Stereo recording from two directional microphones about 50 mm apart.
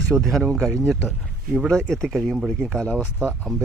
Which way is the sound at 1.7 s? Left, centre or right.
Centre.